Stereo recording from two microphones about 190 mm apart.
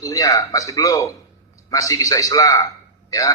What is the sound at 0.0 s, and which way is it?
A man's voice, 15° left (ahead or behind).